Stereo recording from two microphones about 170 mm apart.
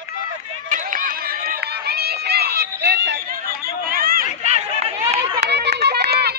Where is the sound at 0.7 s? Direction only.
50° right (ahead or behind); by 3.3 s 85° right.